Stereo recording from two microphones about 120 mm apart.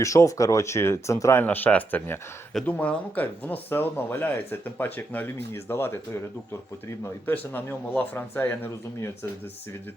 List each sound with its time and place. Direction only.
0.0 s speech: 25° left (ahead or behind)
7.0 s speech: 15° left (ahead or behind)